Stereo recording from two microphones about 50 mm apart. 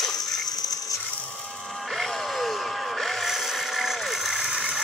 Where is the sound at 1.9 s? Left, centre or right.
Centre.